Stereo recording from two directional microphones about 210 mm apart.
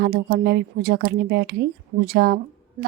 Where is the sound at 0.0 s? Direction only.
50° right (ahead or behind).